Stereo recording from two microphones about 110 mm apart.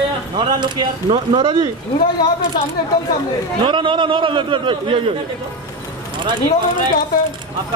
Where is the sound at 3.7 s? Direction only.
45° right (ahead or behind).